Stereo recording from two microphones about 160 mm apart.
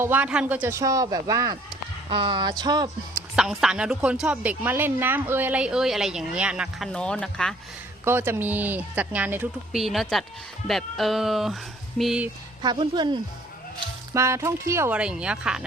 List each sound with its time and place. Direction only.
0.0 s speech: 10° right (ahead or behind)
2.0 s speech: 35° right (ahead or behind)
3.3 s a woman's voice: 5° right (ahead or behind)
8.0 s speech: 15° right (ahead or behind)
9.7 s a woman's voice: centre (ahead or behind)
12.6 s speech: 30° right (ahead or behind)
14.1 s speech: 20° right (ahead or behind)
14.9 s a woman's voice: 5° right (ahead or behind)